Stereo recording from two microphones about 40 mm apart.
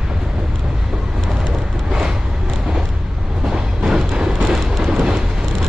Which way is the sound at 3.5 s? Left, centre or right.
Centre.